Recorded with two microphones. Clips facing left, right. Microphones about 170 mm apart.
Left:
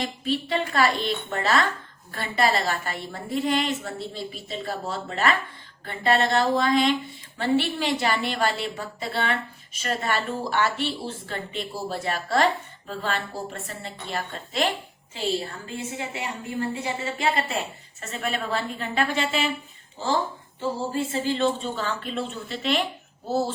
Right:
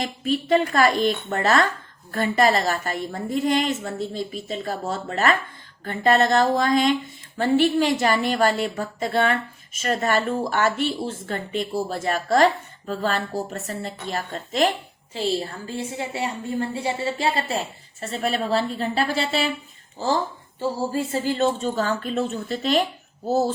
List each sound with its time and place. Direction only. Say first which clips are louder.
0.3 s a woman's voice: right 7 dB; 45° right (ahead or behind)
20.6 s a woman's voice: right 2 dB; 40° right (ahead or behind)